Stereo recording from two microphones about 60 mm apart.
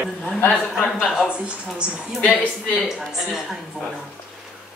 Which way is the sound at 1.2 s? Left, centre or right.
Centre.